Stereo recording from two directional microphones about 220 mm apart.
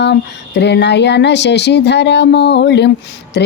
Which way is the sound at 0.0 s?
50° left (ahead or behind).